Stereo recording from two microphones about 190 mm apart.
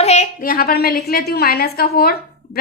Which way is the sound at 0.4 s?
50° left (ahead or behind).